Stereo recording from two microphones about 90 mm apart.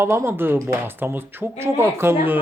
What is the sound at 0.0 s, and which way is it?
Speech, 30° right (ahead or behind).